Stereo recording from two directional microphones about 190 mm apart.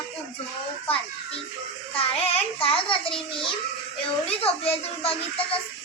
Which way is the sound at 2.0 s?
30° left (ahead or behind).